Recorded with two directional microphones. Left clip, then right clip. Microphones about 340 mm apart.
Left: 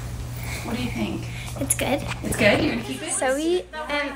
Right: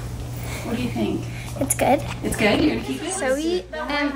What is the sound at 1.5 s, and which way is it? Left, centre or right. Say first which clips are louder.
A woman's voice: right 6 dB; centre.